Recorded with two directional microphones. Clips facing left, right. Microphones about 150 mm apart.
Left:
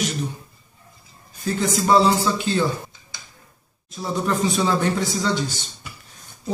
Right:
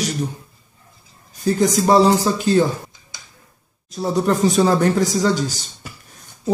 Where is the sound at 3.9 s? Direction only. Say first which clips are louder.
Right 5 dB; 40° right (ahead or behind).